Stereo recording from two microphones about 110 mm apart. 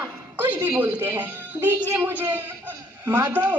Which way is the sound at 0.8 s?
15° right (ahead or behind).